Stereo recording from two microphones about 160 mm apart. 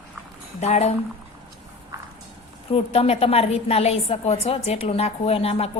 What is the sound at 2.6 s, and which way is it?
A woman's voice, 40° left (ahead or behind).